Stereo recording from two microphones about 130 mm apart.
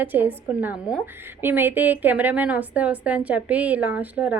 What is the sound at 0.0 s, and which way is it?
A woman's voice, 15° right (ahead or behind).